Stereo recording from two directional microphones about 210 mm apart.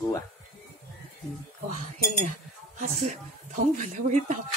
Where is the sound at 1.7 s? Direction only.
35° right (ahead or behind).